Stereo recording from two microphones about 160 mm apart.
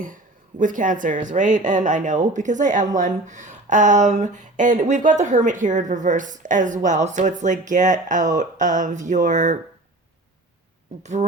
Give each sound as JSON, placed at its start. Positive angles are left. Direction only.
{"t": 0.6, "sound": "a woman's voice", "side_deg": -55}
{"t": 11.0, "sound": "a woman's voice", "side_deg": -45}